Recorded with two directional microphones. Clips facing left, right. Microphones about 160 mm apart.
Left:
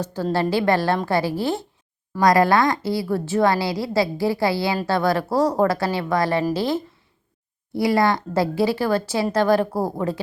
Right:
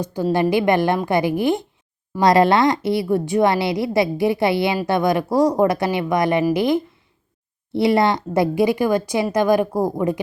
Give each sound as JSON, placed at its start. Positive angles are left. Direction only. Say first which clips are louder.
{"t": 0.0, "sound": "a woman's voice", "louder": "right 3 dB", "side_deg": -15}